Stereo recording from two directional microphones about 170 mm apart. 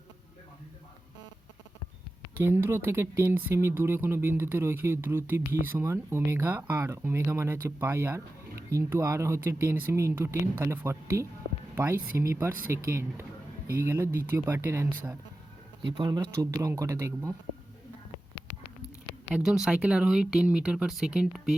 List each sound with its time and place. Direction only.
2.4 s speech: 15° right (ahead or behind)
15.8 s speech: 30° right (ahead or behind)
19.3 s speech: 5° right (ahead or behind)